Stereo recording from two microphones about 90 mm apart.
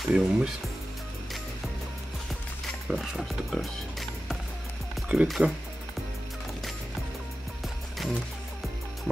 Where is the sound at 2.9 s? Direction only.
Centre (ahead or behind).